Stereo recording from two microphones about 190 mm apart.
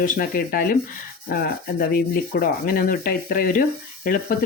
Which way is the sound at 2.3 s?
50° left (ahead or behind).